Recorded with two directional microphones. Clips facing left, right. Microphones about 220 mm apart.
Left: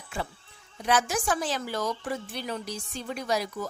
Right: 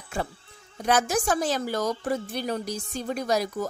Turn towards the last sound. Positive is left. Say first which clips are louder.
# right 4 dB
turn(degrees=-40)  # may be behind; listen again after turning